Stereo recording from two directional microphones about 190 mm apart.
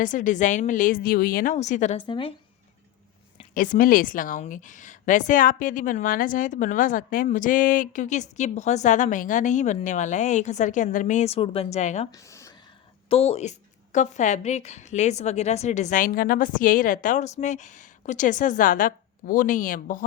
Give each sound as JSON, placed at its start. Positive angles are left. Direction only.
{"t": 0.0, "sound": "a woman's voice", "side_deg": 45}
{"t": 1.5, "sound": "a woman's voice", "side_deg": 40}
{"t": 2.0, "sound": "speech", "side_deg": 25}
{"t": 3.5, "sound": "a woman's voice", "side_deg": 45}
{"t": 12.1, "sound": "speech", "side_deg": 15}
{"t": 13.1, "sound": "a woman's voice", "side_deg": 30}